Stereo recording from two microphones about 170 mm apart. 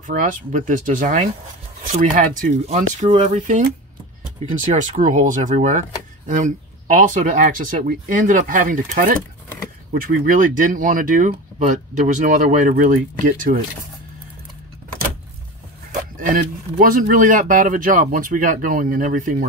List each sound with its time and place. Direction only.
0.0 s speech: 50° right (ahead or behind)
2.6 s speech: 40° right (ahead or behind)
4.9 s speech: 45° right (ahead or behind)
10.2 s speech: 50° right (ahead or behind)
16.2 s speech: 55° right (ahead or behind)